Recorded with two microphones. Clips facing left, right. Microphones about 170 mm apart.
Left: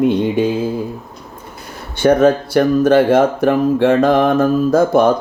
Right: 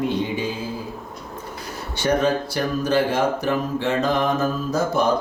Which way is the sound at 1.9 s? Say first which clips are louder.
Left 9 dB; 55° left (ahead or behind).